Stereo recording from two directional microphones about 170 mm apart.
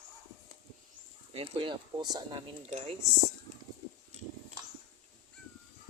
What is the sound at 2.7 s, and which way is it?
Speech, 45° right (ahead or behind).